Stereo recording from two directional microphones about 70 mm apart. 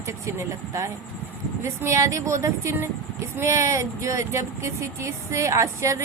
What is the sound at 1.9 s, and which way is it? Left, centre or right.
Speech, right.